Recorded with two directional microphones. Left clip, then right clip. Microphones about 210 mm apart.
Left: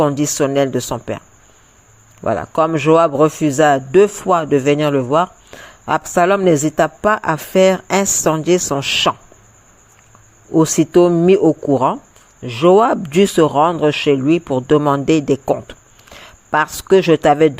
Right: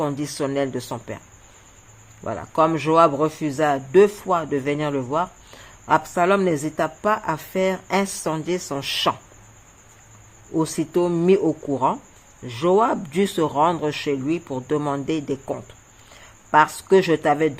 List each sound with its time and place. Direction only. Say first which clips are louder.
0.0 s speech: left 9 dB; 30° left (ahead or behind)
2.2 s a man's voice: left 4 dB; 30° left (ahead or behind)
10.5 s a man's voice: left 10 dB; 30° left (ahead or behind)